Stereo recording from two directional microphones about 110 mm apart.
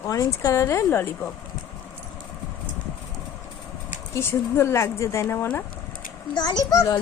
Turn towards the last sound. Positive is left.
turn(degrees=35)  # may be behind; listen again after turning